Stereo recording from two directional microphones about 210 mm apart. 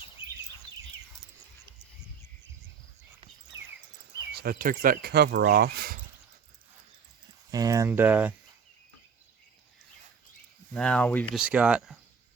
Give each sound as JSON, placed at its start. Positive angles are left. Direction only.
{"t": 3.5, "sound": "cricket", "side_deg": -15}
{"t": 4.4, "sound": "speech", "side_deg": -45}
{"t": 7.5, "sound": "speech", "side_deg": -15}
{"t": 10.8, "sound": "speech", "side_deg": 5}
{"t": 11.3, "sound": "speech", "side_deg": -5}